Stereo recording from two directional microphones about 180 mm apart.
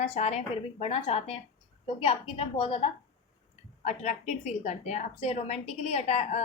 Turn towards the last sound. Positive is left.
turn(degrees=35)  # may be behind; listen again after turning